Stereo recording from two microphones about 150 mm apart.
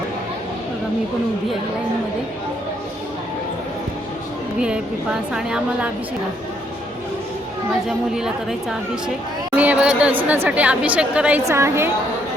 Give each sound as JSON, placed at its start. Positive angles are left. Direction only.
{"t": 5.3, "sound": "speech", "side_deg": -5}
{"t": 7.9, "sound": "speech", "side_deg": -5}
{"t": 9.6, "sound": "a woman's voice", "side_deg": -10}